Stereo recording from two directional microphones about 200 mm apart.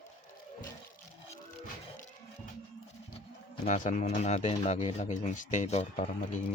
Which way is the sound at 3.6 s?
35° left (ahead or behind).